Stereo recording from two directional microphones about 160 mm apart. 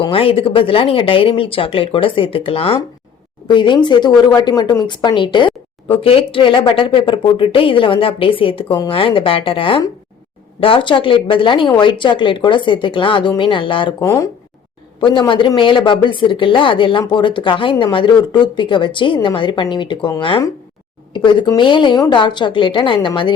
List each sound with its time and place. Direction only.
0.0 s a woman's voice: 35° left (ahead or behind)
14.0 s speech: 20° left (ahead or behind)
15.0 s a woman's voice: 30° left (ahead or behind)